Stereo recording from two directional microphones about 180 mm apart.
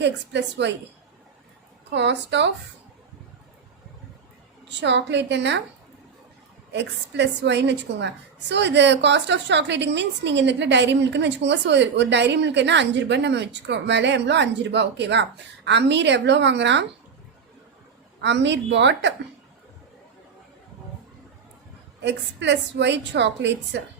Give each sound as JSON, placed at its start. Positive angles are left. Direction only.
{"t": 0.0, "sound": "a woman's voice", "side_deg": -75}
{"t": 1.9, "sound": "a woman's voice", "side_deg": -75}
{"t": 4.7, "sound": "a woman's voice", "side_deg": -75}
{"t": 6.7, "sound": "a woman's voice", "side_deg": -75}
{"t": 18.2, "sound": "a woman's voice", "side_deg": -75}
{"t": 22.0, "sound": "a woman's voice", "side_deg": -75}